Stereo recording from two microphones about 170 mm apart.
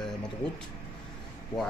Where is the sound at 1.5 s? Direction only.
20° left (ahead or behind).